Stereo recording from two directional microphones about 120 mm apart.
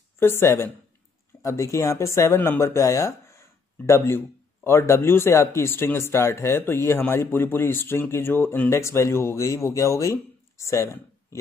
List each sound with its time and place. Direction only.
0.4 s speech: 20° left (ahead or behind)